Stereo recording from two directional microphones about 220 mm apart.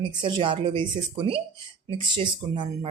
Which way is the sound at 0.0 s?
20° right (ahead or behind).